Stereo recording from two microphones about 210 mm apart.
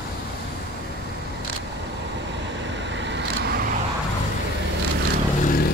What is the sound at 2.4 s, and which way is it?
Vehicle, 60° right (ahead or behind).